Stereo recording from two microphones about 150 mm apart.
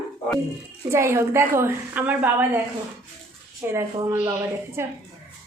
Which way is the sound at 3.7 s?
20° right (ahead or behind).